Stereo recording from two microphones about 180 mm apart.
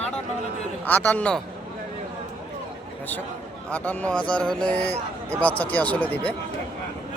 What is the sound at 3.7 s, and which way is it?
A man's voice, 10° left (ahead or behind).